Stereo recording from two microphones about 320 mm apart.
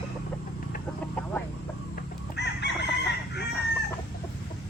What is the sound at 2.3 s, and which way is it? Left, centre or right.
Chicken, left.